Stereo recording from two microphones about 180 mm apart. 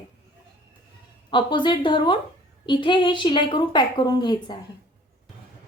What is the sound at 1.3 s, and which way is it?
Speech, 25° left (ahead or behind).